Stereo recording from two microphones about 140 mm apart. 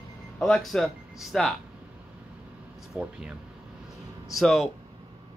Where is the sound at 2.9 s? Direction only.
5° right (ahead or behind).